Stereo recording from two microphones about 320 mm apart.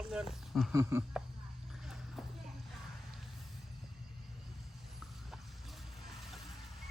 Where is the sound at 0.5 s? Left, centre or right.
Centre.